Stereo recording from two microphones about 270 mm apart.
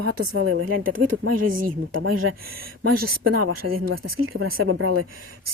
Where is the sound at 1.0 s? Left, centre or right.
Right.